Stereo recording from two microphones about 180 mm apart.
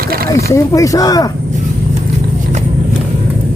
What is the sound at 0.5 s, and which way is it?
Speech, 20° left (ahead or behind).